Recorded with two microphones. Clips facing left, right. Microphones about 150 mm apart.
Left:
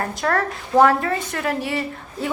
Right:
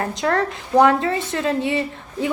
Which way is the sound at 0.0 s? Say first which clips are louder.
Right 1 dB; 20° right (ahead or behind).